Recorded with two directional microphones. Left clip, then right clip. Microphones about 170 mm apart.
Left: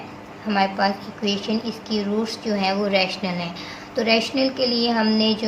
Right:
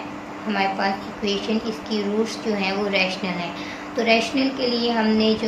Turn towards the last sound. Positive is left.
turn(degrees=30)  # may be behind; listen again after turning